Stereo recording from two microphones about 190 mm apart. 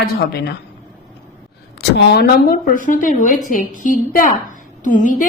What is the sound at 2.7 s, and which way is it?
A woman's voice, 45° left (ahead or behind).